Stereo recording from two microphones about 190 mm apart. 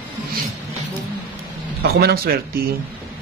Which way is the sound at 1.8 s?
55° right (ahead or behind).